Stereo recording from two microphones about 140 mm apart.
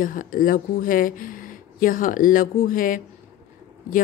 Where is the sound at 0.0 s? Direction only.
80° left.